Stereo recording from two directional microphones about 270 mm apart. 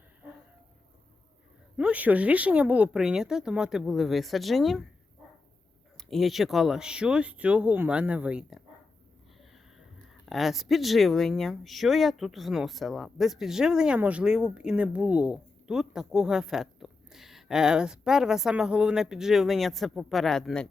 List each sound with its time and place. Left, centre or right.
1.7 s speech: centre
6.0 s speech: centre
10.2 s speech: centre